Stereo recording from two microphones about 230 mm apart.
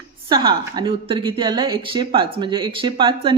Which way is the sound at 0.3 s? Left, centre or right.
Centre.